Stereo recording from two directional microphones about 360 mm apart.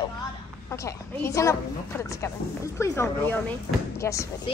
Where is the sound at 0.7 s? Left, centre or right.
Centre.